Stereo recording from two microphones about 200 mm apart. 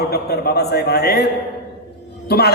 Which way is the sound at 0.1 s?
55° left (ahead or behind).